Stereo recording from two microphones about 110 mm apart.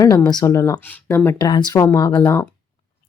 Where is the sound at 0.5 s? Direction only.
30° left (ahead or behind).